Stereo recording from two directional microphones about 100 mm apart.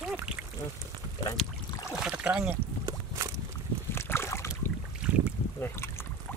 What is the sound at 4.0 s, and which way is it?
Boat, 25° left (ahead or behind).